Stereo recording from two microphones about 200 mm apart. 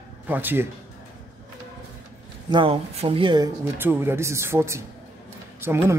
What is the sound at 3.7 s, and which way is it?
A man's voice, 10° right (ahead or behind).